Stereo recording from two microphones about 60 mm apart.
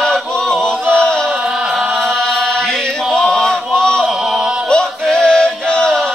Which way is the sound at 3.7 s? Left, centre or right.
Centre.